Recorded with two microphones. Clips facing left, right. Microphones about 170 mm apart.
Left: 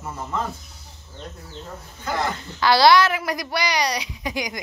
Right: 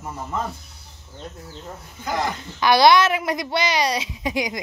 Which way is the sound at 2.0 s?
15° right (ahead or behind).